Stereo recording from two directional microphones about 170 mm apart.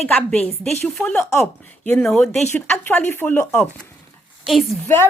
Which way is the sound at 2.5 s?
10° left (ahead or behind).